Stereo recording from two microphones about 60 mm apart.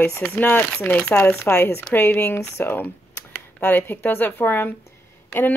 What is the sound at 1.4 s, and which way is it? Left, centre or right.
Speech, left.